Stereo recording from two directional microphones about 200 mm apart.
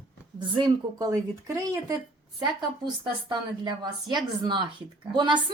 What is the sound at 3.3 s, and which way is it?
Speech, 20° right (ahead or behind).